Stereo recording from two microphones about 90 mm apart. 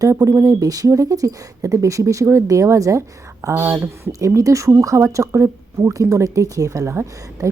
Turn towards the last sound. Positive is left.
turn(degrees=-30)  # may be behind; listen again after turning